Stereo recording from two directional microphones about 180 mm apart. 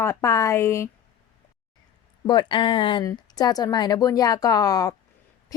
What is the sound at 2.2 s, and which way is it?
A woman's voice, 25° left (ahead or behind).